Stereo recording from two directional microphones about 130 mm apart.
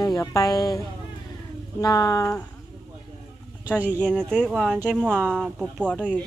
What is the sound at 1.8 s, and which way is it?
Speech, 25° left (ahead or behind).